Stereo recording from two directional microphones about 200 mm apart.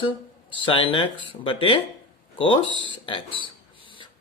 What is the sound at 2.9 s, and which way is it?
Speech, 25° left (ahead or behind).